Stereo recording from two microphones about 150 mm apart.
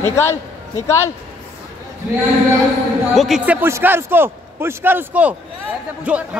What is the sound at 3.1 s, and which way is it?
Speech, centre (ahead or behind).